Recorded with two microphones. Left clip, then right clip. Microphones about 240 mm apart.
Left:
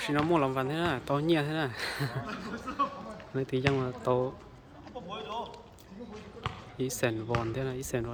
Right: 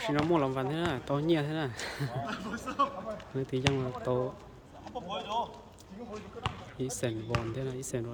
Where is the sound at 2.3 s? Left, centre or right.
Right.